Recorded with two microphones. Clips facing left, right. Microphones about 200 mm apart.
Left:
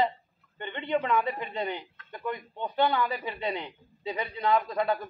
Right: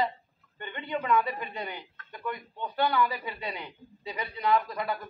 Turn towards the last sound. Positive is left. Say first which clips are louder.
# left 2 dB
turn(degrees=25)  # may be behind; listen again after turning